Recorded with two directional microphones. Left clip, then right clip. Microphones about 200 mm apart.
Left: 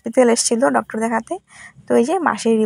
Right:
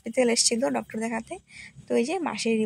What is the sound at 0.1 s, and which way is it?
A woman's voice, 25° left (ahead or behind).